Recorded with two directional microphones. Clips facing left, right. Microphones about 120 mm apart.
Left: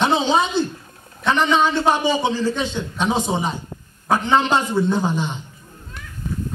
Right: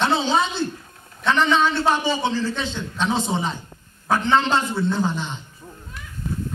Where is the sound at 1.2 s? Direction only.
15° left (ahead or behind).